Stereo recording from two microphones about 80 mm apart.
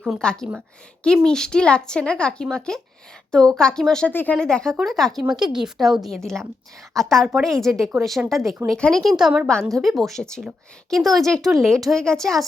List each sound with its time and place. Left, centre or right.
0.2 s speech: centre
4.1 s speech: left
4.4 s speech: centre